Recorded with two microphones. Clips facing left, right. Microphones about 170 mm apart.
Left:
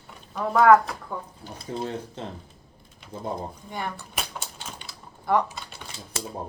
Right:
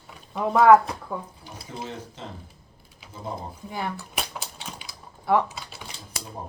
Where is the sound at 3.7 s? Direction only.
5° right (ahead or behind).